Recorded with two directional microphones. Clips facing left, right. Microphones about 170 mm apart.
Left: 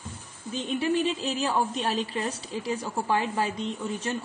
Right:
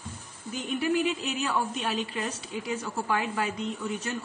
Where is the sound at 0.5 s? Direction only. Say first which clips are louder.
Left 1 dB; 30° left (ahead or behind).